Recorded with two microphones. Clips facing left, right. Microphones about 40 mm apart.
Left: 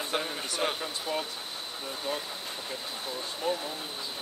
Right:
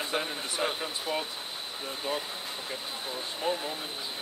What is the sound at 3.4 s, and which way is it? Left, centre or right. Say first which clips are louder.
Speech: even; right.